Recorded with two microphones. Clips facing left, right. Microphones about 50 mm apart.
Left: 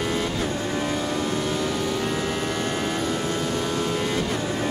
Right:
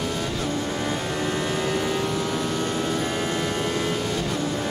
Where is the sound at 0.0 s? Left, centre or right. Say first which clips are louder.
Left 2 dB; left.